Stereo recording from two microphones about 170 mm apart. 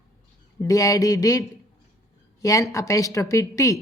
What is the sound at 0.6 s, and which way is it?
A woman's voice, 20° left (ahead or behind).